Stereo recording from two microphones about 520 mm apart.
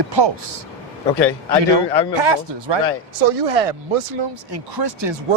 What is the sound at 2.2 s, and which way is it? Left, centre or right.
Speech, right.